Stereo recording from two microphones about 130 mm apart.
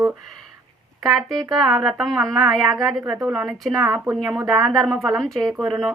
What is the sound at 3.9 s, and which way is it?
Speech, 10° right (ahead or behind).